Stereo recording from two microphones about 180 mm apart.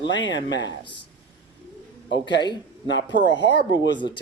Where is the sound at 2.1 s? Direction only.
80° left.